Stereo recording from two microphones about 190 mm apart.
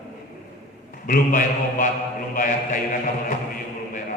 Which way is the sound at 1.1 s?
45° left (ahead or behind).